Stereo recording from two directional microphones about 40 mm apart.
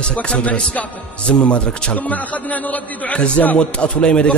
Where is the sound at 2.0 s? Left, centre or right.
Left.